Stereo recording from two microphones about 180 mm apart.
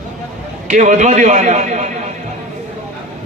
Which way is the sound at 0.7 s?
45° right (ahead or behind).